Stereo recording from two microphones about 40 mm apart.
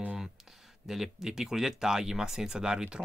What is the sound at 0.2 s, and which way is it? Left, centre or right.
Speech, centre.